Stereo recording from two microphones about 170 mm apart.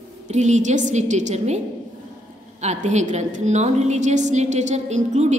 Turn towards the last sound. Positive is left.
turn(degrees=-45)  # may be behind; listen again after turning